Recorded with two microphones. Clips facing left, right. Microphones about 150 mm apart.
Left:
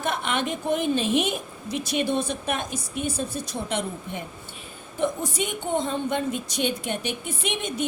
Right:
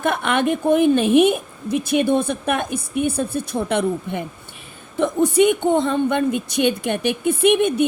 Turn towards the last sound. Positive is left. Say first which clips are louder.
# right 14 dB
turn(degrees=-60)  # may be behind; listen again after turning